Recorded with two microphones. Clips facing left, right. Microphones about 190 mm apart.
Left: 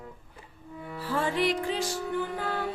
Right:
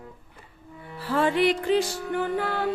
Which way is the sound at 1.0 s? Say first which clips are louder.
Right 5 dB; 70° right (ahead or behind).